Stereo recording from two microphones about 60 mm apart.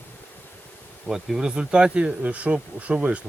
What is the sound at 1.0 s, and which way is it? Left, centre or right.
Speech, centre.